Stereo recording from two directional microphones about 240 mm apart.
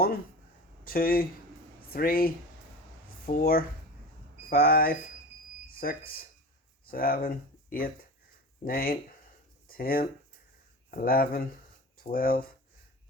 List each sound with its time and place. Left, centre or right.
0.9 s speech: left